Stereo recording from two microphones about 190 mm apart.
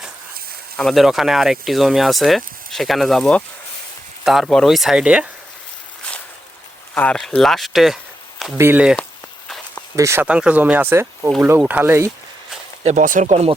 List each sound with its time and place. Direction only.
0.8 s speech: centre (ahead or behind)
6.0 s boat: 5° left (ahead or behind)
6.9 s speech: 5° left (ahead or behind); by 12.1 s 15° right (ahead or behind)
12.8 s speech: 40° right (ahead or behind)